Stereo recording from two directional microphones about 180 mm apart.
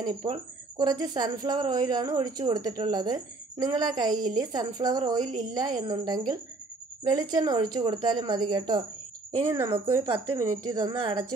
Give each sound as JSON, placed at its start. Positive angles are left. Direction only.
{"t": 0.0, "sound": "speech", "side_deg": -25}